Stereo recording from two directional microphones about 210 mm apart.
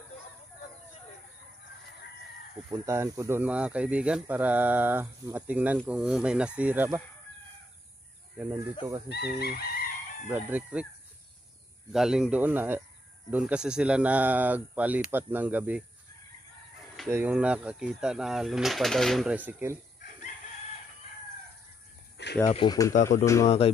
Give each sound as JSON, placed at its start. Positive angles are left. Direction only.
{"t": 2.8, "sound": "speech", "side_deg": -15}
{"t": 8.4, "sound": "speech", "side_deg": -10}
{"t": 9.1, "sound": "chicken", "side_deg": 50}
{"t": 10.2, "sound": "speech", "side_deg": -5}
{"t": 11.9, "sound": "speech", "side_deg": 0}
{"t": 17.1, "sound": "speech", "side_deg": -10}
{"t": 22.1, "sound": "a sound", "side_deg": 55}
{"t": 22.5, "sound": "speech", "side_deg": 20}
{"t": 23.4, "sound": "speech", "side_deg": 30}